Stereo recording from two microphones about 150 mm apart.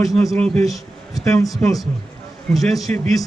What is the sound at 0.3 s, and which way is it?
Speech, 5° left (ahead or behind).